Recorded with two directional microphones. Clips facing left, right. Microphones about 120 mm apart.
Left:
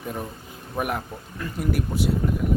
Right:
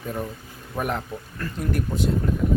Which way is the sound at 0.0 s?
10° left (ahead or behind).